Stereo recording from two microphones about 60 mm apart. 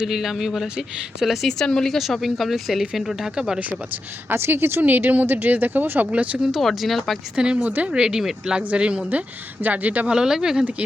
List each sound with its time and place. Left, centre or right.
0.0 s speech: centre
4.3 s speech: right
4.8 s speech: right
6.4 s speech: centre
7.3 s speech: centre
9.0 s speech: right
10.1 s speech: centre